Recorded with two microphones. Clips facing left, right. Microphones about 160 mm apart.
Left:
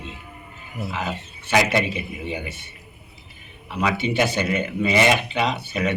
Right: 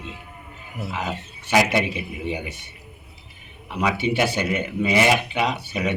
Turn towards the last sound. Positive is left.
turn(degrees=-10)  # may be behind; listen again after turning